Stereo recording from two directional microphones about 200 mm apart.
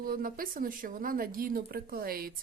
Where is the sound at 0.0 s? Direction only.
45° right (ahead or behind).